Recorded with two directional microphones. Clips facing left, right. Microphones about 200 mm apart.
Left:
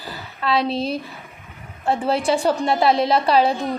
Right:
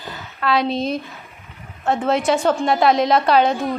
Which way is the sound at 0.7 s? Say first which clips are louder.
Right 1 dB; 30° left (ahead or behind).